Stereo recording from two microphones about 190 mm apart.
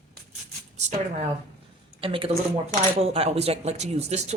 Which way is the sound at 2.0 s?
30° right (ahead or behind).